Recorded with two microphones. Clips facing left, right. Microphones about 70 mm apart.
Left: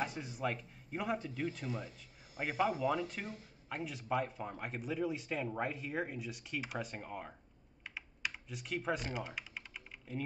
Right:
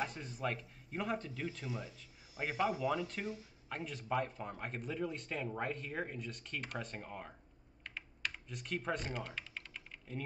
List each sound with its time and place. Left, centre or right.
0.0 s speech: centre
7.8 s typing: centre